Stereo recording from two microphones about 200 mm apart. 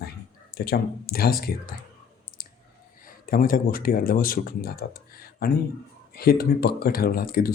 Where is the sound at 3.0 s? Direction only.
45° left (ahead or behind).